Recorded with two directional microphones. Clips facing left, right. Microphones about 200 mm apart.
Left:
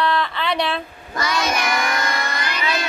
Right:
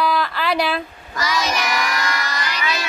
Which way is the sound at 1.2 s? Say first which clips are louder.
Even; 55° left (ahead or behind).